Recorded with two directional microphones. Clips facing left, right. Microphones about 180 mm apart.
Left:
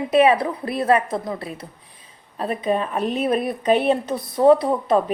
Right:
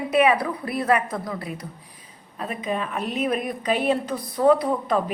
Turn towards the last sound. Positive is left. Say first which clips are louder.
# left 4 dB
turn(degrees=25)  # may be behind; listen again after turning